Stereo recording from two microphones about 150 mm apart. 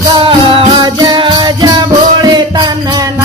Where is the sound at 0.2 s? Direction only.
35° right (ahead or behind).